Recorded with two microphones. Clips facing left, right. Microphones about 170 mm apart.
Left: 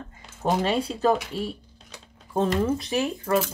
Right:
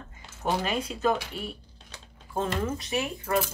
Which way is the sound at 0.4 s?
35° left (ahead or behind).